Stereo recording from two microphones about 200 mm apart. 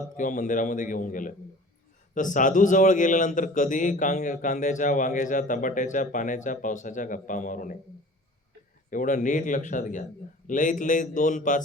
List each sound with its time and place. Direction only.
0.2 s a man's voice: 40° left (ahead or behind)
8.9 s a man's voice: 40° left (ahead or behind)